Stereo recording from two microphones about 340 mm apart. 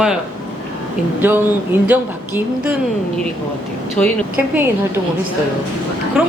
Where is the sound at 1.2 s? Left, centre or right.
Centre.